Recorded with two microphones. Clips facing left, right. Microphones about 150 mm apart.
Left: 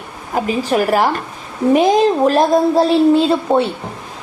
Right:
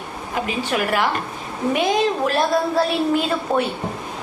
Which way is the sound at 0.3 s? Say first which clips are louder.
Left 7 dB; 40° left (ahead or behind).